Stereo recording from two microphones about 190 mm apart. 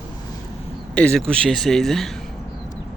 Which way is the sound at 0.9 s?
5° left (ahead or behind).